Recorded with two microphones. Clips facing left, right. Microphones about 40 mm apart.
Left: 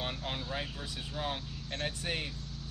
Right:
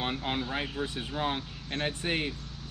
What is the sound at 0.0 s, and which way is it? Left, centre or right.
Speech, right.